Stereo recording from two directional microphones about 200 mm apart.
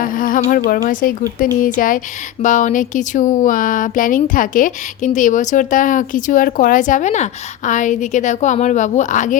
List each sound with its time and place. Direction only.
0.0 s a woman's voice: 45° left (ahead or behind)